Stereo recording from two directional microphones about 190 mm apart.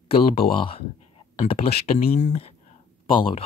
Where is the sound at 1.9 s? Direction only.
45° left (ahead or behind).